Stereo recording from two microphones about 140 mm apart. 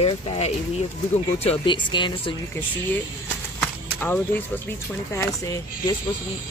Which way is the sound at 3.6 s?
15° left (ahead or behind).